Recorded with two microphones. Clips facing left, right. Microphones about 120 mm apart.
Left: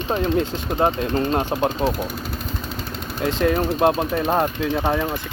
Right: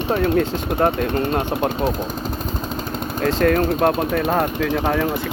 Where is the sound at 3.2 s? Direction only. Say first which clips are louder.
Right 3 dB; 20° left (ahead or behind).